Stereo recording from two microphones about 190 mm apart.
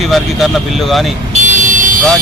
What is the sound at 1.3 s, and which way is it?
Vehicle, 40° right (ahead or behind).